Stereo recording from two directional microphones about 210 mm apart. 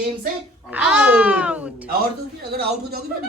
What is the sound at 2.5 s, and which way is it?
Speech, 50° right (ahead or behind).